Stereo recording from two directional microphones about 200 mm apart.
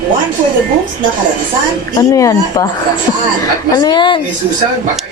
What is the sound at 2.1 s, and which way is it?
Speech, 15° left (ahead or behind).